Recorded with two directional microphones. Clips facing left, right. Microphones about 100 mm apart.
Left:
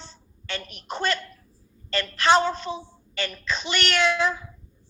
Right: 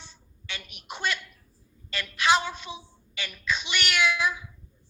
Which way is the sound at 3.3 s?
45° left (ahead or behind).